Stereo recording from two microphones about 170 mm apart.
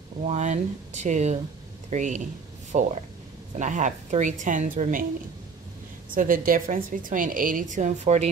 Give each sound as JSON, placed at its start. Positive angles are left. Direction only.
{"t": 0.2, "sound": "a woman's voice", "side_deg": -45}
{"t": 6.1, "sound": "a woman's voice", "side_deg": -55}